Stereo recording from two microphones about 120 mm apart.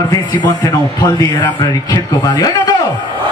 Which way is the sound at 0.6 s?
35° left (ahead or behind).